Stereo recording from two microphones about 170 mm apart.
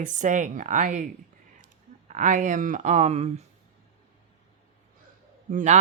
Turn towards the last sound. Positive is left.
turn(degrees=-45)  # may be behind; listen again after turning